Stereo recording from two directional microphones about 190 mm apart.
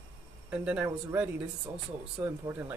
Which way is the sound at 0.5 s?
5° right (ahead or behind).